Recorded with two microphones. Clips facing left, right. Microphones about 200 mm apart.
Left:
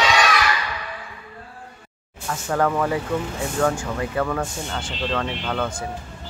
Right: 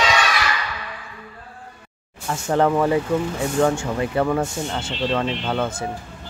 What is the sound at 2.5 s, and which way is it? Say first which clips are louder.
Speech: right 4 dB; 25° right (ahead or behind).